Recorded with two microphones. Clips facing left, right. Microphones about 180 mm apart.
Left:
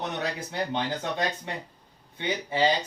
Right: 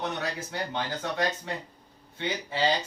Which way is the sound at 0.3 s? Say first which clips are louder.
Left 3 dB; 20° left (ahead or behind).